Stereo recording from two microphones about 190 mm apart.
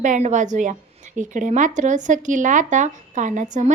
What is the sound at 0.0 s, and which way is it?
Speech, 40° right (ahead or behind).